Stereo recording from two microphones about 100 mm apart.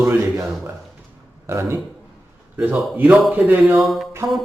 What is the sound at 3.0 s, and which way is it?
Speech, 5° right (ahead or behind).